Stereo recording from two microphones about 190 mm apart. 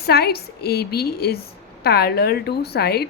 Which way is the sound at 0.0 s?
55° left (ahead or behind).